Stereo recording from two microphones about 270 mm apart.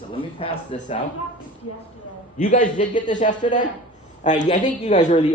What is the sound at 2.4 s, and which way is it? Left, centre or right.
Speech, left.